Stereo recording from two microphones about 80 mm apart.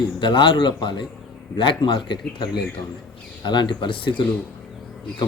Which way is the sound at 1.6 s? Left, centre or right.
Left.